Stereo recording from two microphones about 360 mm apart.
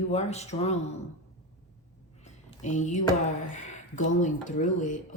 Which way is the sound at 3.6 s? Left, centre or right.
Left.